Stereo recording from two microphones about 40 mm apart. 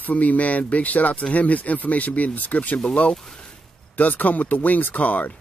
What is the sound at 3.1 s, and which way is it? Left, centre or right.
Speech, centre.